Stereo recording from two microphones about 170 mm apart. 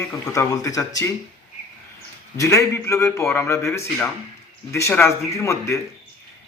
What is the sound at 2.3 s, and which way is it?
A man's voice, 20° left (ahead or behind).